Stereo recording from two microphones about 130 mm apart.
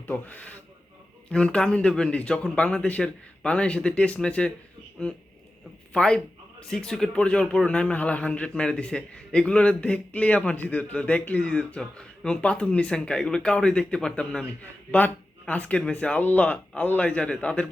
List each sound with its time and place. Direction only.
0.1 s speech: 10° left (ahead or behind)
5.9 s speech: 5° left (ahead or behind)